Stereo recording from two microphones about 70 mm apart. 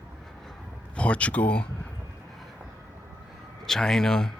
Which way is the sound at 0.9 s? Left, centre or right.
Centre.